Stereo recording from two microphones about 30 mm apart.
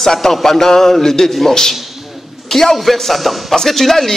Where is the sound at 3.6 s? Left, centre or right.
Centre.